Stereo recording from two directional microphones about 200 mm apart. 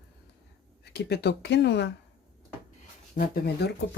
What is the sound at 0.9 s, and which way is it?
Speech, 55° left (ahead or behind).